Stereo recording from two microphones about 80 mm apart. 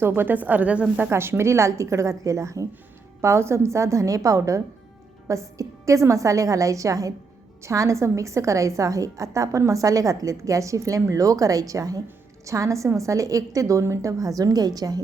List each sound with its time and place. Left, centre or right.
0.1 s a woman's voice: right
1.1 s a woman's voice: right